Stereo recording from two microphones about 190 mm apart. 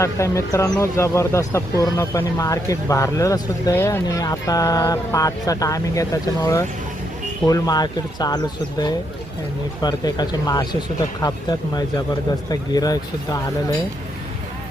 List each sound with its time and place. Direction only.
0.0 s speech: 15° left (ahead or behind)
9.8 s speech: 20° left (ahead or behind)